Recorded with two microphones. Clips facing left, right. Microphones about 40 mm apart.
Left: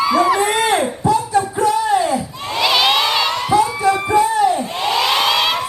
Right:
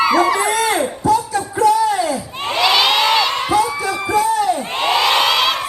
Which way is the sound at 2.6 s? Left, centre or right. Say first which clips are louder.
Right 1 dB; right.